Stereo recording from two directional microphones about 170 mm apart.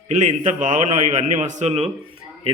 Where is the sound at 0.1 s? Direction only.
45° right (ahead or behind).